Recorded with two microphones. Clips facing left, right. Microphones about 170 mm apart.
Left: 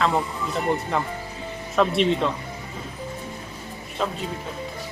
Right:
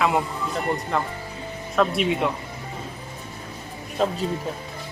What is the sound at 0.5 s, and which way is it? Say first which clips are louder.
Speech: left 1 dB; centre (ahead or behind).